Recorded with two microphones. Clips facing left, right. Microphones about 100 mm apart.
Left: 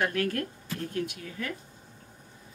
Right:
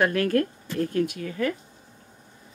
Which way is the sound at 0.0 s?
65° right (ahead or behind).